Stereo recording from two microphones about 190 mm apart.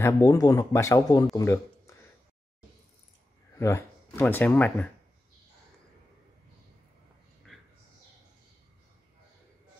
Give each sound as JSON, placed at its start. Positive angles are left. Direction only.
{"t": 0.0, "sound": "speech", "side_deg": 20}
{"t": 3.5, "sound": "speech", "side_deg": 15}
{"t": 7.5, "sound": "a sound", "side_deg": 0}